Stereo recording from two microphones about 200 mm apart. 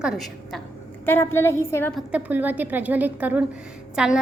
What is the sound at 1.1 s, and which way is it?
Speech, 10° left (ahead or behind).